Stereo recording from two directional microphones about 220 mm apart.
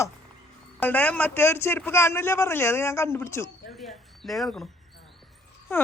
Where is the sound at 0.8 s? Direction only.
5° left (ahead or behind).